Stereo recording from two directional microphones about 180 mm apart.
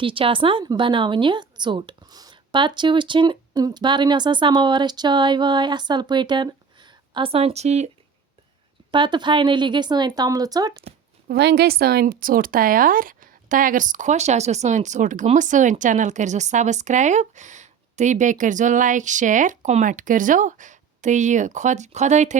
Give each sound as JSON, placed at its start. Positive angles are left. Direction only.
{"t": 0.0, "sound": "a woman's voice", "side_deg": -30}
{"t": 8.9, "sound": "a woman's voice", "side_deg": -25}
{"t": 11.3, "sound": "speech", "side_deg": -65}